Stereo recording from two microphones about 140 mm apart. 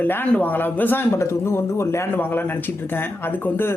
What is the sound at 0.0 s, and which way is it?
Speech, 15° left (ahead or behind).